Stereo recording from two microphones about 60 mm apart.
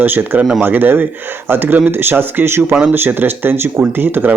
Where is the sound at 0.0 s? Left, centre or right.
Right.